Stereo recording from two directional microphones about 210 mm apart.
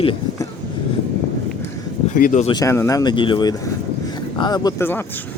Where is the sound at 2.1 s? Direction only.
40° left (ahead or behind).